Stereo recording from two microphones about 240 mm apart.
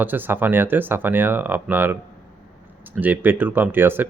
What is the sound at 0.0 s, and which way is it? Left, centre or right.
Speech, centre.